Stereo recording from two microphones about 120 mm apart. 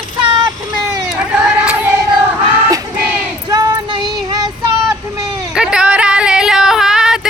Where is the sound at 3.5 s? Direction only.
30° right (ahead or behind).